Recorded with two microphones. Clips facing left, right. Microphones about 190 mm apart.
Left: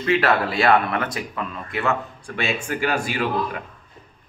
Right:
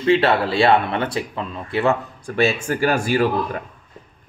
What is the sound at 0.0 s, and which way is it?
Speech, 30° right (ahead or behind).